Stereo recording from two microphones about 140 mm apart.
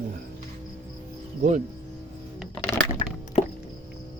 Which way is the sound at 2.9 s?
35° left (ahead or behind).